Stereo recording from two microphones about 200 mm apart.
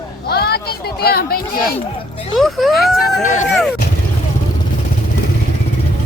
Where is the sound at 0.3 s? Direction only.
50° left (ahead or behind).